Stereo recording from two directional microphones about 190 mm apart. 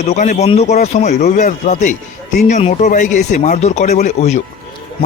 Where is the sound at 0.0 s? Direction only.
35° left (ahead or behind).